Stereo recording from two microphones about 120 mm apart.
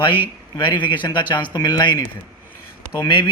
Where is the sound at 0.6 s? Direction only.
40° left (ahead or behind).